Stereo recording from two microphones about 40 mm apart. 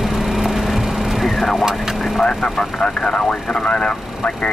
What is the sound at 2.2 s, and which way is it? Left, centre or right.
Speech, left.